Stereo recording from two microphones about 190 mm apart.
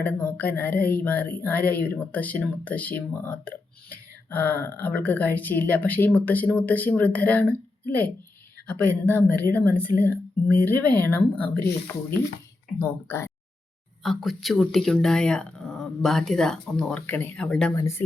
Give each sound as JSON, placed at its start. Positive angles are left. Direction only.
{"t": 0.0, "sound": "speech", "side_deg": 10}
{"t": 11.6, "sound": "speech", "side_deg": 55}
{"t": 12.8, "sound": "speech", "side_deg": 10}
{"t": 14.0, "sound": "speech", "side_deg": 0}
{"t": 17.7, "sound": "speech", "side_deg": 15}